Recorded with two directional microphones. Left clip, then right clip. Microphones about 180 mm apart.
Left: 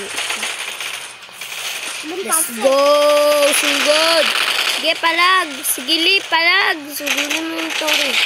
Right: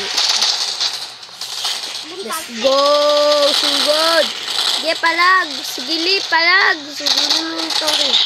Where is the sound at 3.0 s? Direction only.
20° left (ahead or behind).